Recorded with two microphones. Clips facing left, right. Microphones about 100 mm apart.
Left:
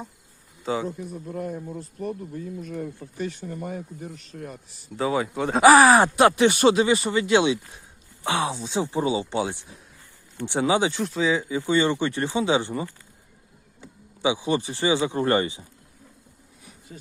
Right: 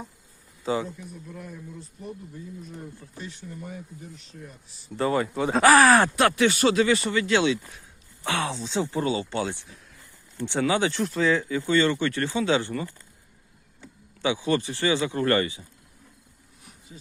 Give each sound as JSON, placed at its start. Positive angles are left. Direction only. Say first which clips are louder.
{"t": 0.6, "sound": "speech", "louder": "even", "side_deg": 0}
{"t": 0.9, "sound": "speech", "louder": "left 7 dB", "side_deg": 45}
{"t": 4.9, "sound": "speech", "louder": "even", "side_deg": 5}
{"t": 5.6, "sound": "speech", "louder": "left 3 dB", "side_deg": 15}
{"t": 11.0, "sound": "speech", "louder": "even", "side_deg": 0}
{"t": 16.9, "sound": "a sound", "louder": "left 4 dB", "side_deg": 70}